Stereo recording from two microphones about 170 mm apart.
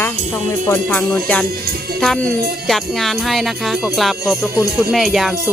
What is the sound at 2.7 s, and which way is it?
Speech, centre (ahead or behind).